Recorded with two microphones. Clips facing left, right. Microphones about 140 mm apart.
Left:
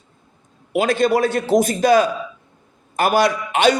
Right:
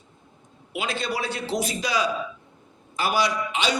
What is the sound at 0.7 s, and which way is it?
A man's voice, 50° left (ahead or behind).